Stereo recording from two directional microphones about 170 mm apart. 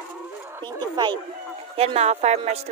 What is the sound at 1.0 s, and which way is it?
Speech, 25° right (ahead or behind).